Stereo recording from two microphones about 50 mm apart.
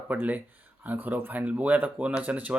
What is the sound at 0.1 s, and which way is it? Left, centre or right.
Speech, right.